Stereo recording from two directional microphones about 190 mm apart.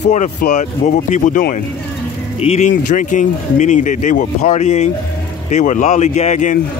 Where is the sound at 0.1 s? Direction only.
40° left (ahead or behind).